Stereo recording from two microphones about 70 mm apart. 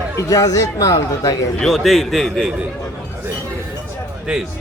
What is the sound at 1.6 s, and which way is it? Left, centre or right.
Speech, centre.